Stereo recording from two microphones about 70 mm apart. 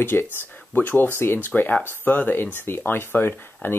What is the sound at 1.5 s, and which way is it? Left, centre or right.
Speech, centre.